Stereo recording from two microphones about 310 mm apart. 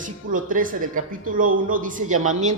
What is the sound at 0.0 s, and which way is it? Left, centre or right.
A man's voice, right.